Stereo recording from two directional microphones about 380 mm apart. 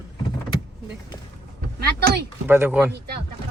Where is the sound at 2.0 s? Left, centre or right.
Right.